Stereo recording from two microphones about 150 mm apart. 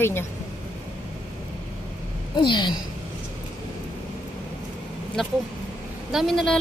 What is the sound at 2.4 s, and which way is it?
Speech, 30° left (ahead or behind).